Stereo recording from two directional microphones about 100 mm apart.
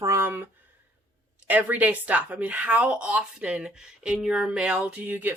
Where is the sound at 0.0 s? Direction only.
30° right (ahead or behind).